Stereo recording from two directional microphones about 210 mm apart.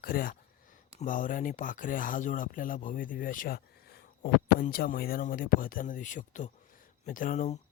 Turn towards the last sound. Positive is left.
turn(degrees=35)  # may be behind; listen again after turning